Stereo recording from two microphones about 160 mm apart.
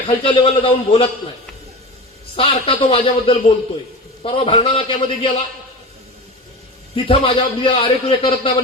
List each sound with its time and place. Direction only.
0.3 s a man's voice: 35° left (ahead or behind)
2.3 s a man's voice: 35° left (ahead or behind)
6.9 s a man's voice: 35° left (ahead or behind)